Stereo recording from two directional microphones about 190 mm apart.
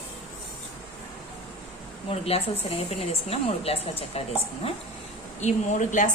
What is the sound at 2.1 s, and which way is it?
A woman's voice, 30° left (ahead or behind).